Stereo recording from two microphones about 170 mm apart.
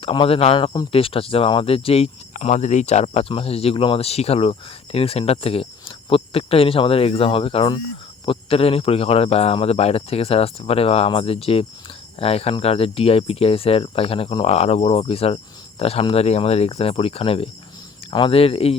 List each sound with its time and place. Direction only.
0.0 s speech: 30° left (ahead or behind)